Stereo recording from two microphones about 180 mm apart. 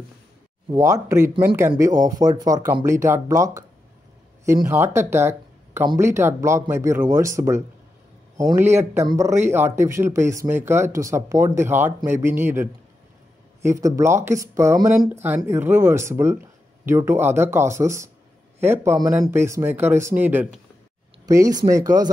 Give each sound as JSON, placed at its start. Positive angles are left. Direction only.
{"t": 0.7, "sound": "speech", "side_deg": -15}